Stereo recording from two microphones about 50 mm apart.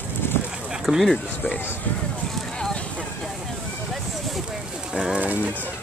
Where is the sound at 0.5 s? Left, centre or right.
Centre.